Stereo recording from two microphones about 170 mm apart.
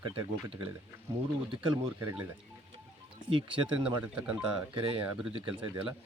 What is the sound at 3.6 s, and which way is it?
Speech, 5° right (ahead or behind).